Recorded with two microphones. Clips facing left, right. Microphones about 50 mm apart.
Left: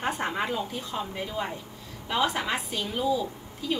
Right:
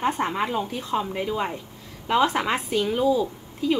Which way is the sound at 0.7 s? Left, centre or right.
Right.